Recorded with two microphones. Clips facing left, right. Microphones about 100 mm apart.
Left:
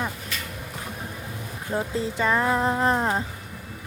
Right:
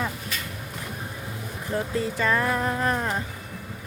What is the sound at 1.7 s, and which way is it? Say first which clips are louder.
A woman's voice: even; 25° left (ahead or behind).